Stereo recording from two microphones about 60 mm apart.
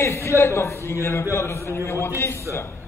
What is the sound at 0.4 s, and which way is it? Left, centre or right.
A man's voice, left.